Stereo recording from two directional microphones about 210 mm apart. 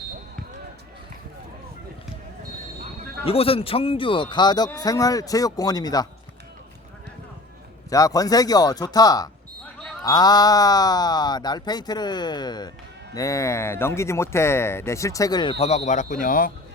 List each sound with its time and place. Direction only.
3.2 s speech: 25° left (ahead or behind)
7.9 s speech: 15° left (ahead or behind); by 16.5 s 40° left (ahead or behind)